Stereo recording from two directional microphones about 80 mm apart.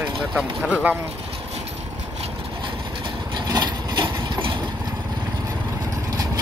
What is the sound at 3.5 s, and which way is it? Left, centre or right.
Wood, right.